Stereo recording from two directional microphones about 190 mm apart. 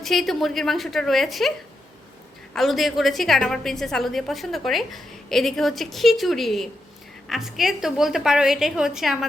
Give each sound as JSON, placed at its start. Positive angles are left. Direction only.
{"t": 0.0, "sound": "a woman's voice", "side_deg": 0}